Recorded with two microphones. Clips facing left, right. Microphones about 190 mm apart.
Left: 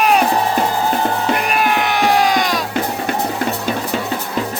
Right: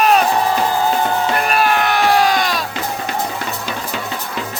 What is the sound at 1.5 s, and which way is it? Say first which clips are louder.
Music: right 1 dB; 15° left (ahead or behind).